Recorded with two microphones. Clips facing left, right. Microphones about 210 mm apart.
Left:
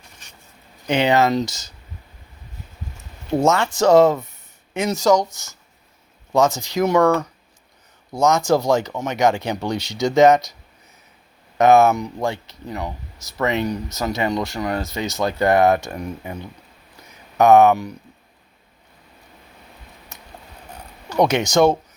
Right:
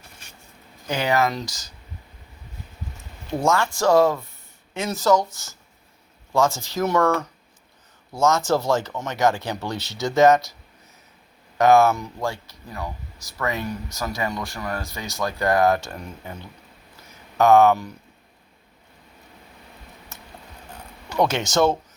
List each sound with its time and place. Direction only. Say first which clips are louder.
0.9 s speech: left 5 dB; 25° left (ahead or behind)
3.4 s speech: left 3 dB; 20° left (ahead or behind)
11.5 s speech: left 2 dB; 20° left (ahead or behind)
21.2 s speech: left 4 dB; 15° left (ahead or behind)